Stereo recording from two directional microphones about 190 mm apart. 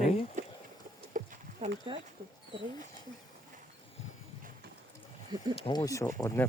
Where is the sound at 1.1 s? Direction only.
45° right (ahead or behind).